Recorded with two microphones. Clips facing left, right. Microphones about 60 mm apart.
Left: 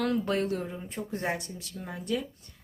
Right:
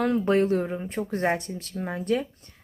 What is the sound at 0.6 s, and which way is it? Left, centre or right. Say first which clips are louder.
Speech: right 7 dB; right.